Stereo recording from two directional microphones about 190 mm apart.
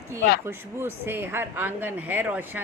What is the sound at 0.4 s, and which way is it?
Speech, 10° right (ahead or behind).